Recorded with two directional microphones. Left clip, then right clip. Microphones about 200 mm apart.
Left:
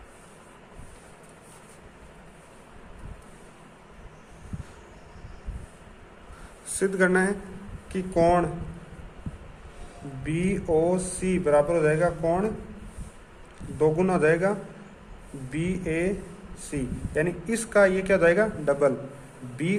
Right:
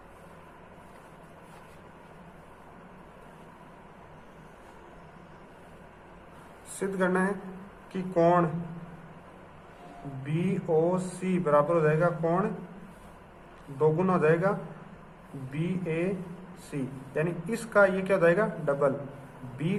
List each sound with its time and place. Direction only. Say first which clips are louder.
6.7 s speech: left 5 dB; 40° left (ahead or behind)
8.1 s speech: left 2 dB; 20° left (ahead or behind)
10.2 s speech: left 3 dB; 25° left (ahead or behind)
13.7 s speech: left 2 dB; 20° left (ahead or behind)
15.5 s speech: left 4 dB; 30° left (ahead or behind)